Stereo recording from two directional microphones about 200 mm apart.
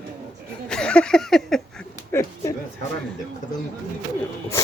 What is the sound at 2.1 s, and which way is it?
Speech, 15° left (ahead or behind).